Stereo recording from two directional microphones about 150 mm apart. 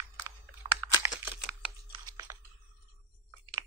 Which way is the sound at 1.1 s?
5° right (ahead or behind).